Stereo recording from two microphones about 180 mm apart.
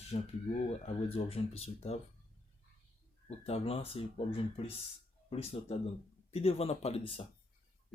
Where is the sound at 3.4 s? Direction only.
35° left (ahead or behind).